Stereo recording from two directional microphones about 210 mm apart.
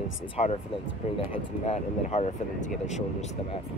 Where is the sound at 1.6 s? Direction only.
30° left (ahead or behind).